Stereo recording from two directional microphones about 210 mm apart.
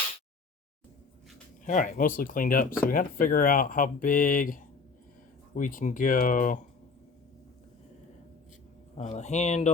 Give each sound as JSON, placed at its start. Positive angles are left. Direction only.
{"t": 1.6, "sound": "speech", "side_deg": 35}
{"t": 9.0, "sound": "speech", "side_deg": 30}